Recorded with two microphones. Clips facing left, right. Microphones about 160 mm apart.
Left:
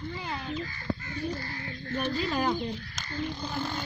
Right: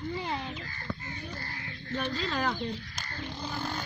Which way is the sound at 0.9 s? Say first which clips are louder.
Left 5 dB; 45° left (ahead or behind).